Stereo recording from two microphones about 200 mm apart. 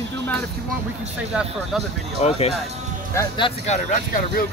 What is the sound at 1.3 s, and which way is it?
Speech, 5° right (ahead or behind).